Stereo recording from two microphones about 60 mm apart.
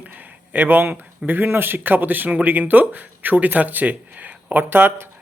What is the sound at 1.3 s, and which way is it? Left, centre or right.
A man's voice, right.